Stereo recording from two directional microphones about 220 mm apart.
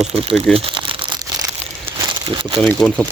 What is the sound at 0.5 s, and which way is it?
Crumpling, 25° right (ahead or behind).